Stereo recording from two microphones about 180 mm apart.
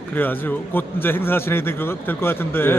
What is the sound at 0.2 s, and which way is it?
Speech, 10° left (ahead or behind).